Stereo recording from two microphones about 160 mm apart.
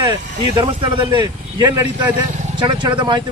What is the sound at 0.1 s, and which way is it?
A man's voice, 30° right (ahead or behind).